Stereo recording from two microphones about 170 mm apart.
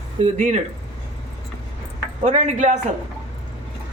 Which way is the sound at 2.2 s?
40° right (ahead or behind).